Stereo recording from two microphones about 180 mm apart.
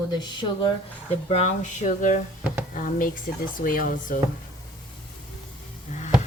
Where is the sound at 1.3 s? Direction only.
40° left (ahead or behind).